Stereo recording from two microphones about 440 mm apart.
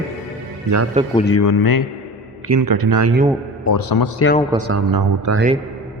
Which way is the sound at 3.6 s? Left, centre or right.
Left.